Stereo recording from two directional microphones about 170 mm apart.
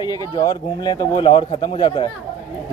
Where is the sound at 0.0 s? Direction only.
25° left (ahead or behind).